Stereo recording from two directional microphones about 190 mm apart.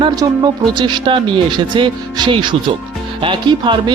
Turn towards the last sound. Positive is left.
turn(degrees=-20)  # may be behind; listen again after turning